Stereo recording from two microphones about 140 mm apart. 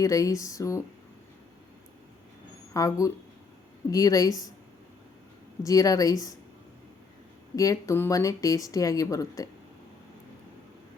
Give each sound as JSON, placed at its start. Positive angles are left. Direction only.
{"t": 0.0, "sound": "speech", "side_deg": 25}
{"t": 2.7, "sound": "speech", "side_deg": 25}
{"t": 5.6, "sound": "speech", "side_deg": 25}
{"t": 7.5, "sound": "speech", "side_deg": 25}